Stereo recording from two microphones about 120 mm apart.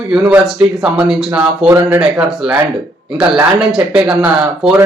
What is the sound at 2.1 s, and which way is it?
Speech, 5° right (ahead or behind).